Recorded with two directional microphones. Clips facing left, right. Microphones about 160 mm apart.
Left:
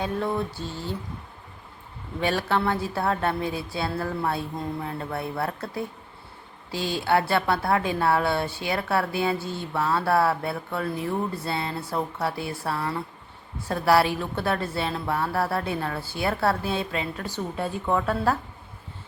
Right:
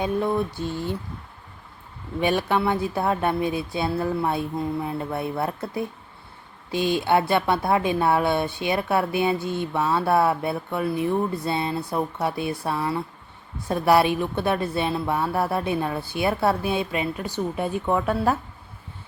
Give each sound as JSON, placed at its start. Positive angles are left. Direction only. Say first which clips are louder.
{"t": 0.0, "sound": "a woman's voice", "louder": "right 3 dB", "side_deg": -15}
{"t": 2.2, "sound": "a woman's voice", "louder": "right 2 dB", "side_deg": -15}